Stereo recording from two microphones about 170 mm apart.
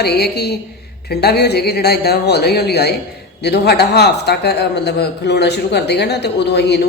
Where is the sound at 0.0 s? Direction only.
75° left (ahead or behind).